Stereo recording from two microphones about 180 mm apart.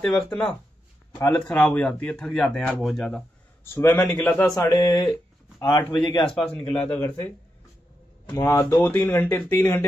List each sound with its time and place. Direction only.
0.0 s speech: 5° left (ahead or behind)
4.6 s speech: 25° left (ahead or behind)
6.3 s speech: 5° left (ahead or behind)
8.4 s speech: 15° left (ahead or behind)